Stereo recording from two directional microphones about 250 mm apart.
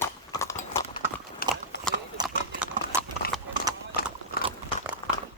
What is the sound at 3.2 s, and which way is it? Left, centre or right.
Clip-clop, left.